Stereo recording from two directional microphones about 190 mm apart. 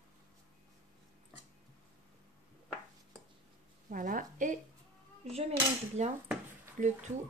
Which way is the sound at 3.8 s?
45° right (ahead or behind).